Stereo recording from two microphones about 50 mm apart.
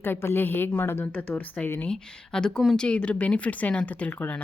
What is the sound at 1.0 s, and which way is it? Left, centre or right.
Speech, left.